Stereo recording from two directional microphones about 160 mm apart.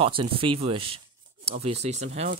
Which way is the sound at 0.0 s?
35° right (ahead or behind).